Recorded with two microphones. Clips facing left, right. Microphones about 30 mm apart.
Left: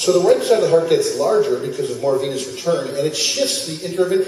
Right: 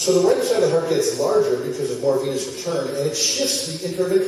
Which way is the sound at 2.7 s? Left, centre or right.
Left.